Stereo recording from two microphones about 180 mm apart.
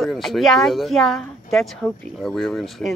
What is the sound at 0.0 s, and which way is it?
Speech, centre (ahead or behind).